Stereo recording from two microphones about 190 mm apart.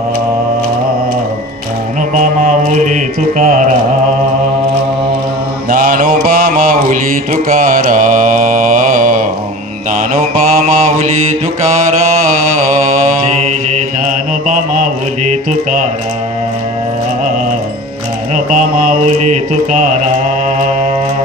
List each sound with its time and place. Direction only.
2.1 s mantra: 40° right (ahead or behind)
5.7 s mantra: 50° right (ahead or behind)
14.0 s mantra: 40° right (ahead or behind)
18.3 s mantra: 40° right (ahead or behind)